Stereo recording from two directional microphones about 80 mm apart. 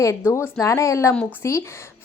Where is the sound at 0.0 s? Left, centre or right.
Left.